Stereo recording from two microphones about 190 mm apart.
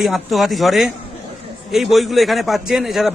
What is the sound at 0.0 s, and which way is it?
A man's voice, centre (ahead or behind).